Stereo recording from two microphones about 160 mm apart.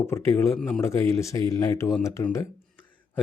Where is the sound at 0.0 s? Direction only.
15° left (ahead or behind).